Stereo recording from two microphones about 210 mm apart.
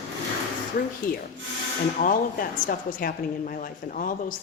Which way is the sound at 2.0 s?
35° left (ahead or behind).